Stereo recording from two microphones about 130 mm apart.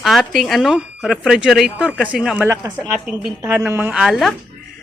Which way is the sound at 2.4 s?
25° right (ahead or behind).